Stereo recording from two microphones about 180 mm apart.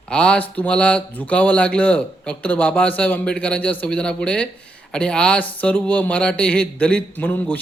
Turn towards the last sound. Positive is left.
turn(degrees=10)  # may be behind; listen again after turning